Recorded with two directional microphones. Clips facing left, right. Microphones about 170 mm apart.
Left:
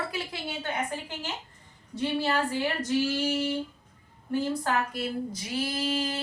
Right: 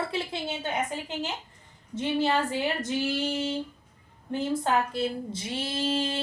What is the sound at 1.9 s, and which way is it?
Female singing, 20° right (ahead or behind).